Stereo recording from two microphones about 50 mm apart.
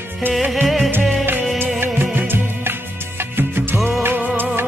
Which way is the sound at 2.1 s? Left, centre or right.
Right.